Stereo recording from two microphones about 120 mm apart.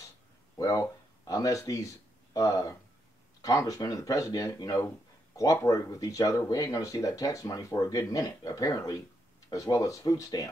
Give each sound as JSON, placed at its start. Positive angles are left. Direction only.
{"t": 0.6, "sound": "speech", "side_deg": 30}